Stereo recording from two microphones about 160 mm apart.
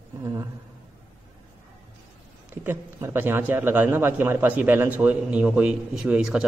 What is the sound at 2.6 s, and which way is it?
Speech, 15° right (ahead or behind).